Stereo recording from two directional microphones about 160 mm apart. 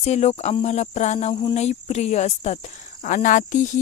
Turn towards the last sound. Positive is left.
turn(degrees=50)  # may be behind; listen again after turning